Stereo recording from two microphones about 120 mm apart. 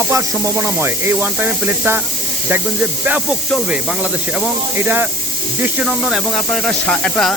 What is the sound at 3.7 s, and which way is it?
Speech, 10° right (ahead or behind).